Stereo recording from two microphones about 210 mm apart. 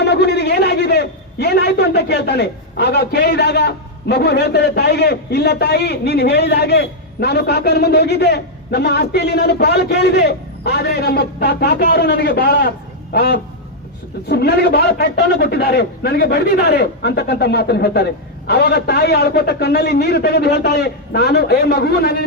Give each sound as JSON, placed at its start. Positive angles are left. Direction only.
{"t": 0.0, "sound": "a man's voice", "side_deg": 50}